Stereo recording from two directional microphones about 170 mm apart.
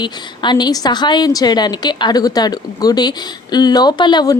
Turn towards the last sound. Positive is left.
turn(degrees=25)  # may be behind; listen again after turning